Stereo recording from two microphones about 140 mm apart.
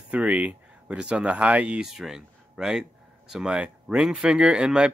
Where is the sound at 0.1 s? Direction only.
10° right (ahead or behind).